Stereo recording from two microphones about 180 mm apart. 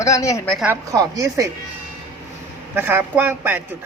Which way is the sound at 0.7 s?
20° right (ahead or behind).